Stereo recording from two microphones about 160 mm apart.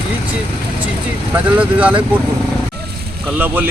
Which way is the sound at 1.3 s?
10° right (ahead or behind).